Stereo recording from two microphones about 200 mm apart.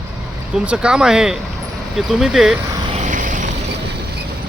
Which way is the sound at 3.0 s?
40° right (ahead or behind).